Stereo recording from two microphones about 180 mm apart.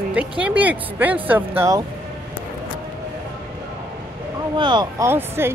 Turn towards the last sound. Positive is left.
turn(degrees=-15)  # may be behind; listen again after turning